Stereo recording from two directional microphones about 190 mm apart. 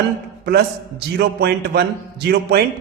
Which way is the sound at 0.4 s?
55° right (ahead or behind).